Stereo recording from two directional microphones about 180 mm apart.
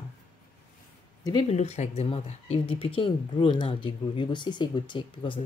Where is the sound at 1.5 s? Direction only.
35° left (ahead or behind).